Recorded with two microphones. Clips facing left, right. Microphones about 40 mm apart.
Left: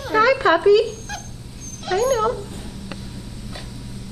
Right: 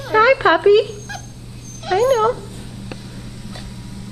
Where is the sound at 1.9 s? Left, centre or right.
Right.